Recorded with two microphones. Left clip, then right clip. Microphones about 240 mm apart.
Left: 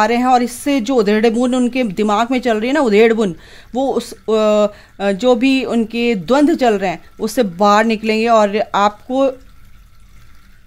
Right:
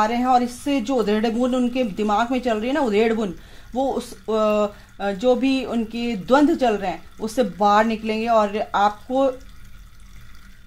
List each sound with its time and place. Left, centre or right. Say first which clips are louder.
0.0 s speech: left 5 dB; left